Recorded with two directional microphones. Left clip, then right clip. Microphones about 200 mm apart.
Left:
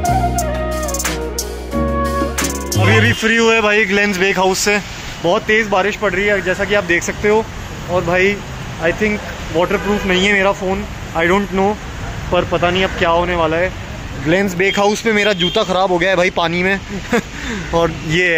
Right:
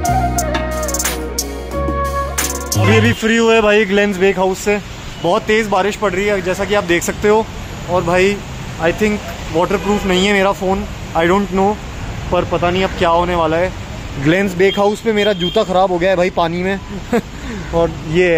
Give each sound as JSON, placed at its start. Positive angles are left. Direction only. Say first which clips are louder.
{"t": 0.0, "sound": "music", "louder": "even", "side_deg": 0}
{"t": 2.9, "sound": "speech", "louder": "even", "side_deg": -10}
{"t": 5.2, "sound": "speech", "louder": "even", "side_deg": -15}